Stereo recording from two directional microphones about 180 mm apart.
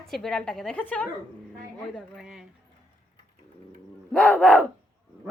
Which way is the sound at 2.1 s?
5° right (ahead or behind).